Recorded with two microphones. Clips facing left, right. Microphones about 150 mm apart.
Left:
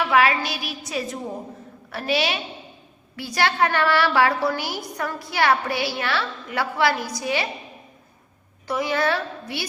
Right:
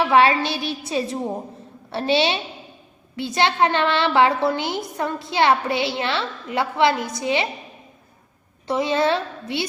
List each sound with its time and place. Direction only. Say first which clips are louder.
0.0 s a woman's voice: right 3 dB; 30° right (ahead or behind)
8.6 s a woman's voice: right 3 dB; 25° right (ahead or behind)